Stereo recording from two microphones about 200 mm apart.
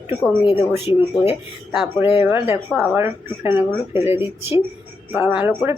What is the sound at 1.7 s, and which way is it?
Speech, centre (ahead or behind).